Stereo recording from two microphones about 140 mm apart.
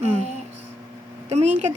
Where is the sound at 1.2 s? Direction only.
55° right (ahead or behind).